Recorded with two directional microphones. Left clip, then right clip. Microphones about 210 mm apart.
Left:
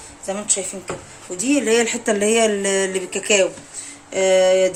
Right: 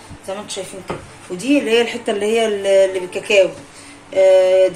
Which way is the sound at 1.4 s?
50° left (ahead or behind).